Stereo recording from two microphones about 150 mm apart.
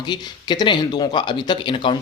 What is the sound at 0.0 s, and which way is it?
Speech, 30° left (ahead or behind).